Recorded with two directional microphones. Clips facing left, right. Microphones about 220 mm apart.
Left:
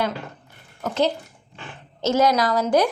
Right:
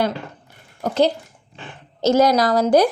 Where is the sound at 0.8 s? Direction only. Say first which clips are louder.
Right 4 dB; 35° right (ahead or behind).